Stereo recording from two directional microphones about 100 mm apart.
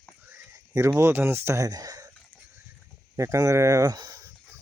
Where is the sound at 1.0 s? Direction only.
25° right (ahead or behind).